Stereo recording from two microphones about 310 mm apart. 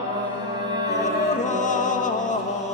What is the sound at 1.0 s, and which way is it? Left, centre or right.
Music, left.